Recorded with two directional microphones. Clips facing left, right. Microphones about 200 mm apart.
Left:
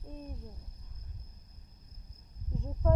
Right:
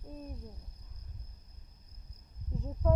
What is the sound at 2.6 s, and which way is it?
Speech, centre (ahead or behind).